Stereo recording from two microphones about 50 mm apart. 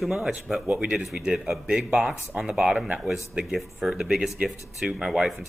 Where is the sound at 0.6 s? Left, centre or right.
Right.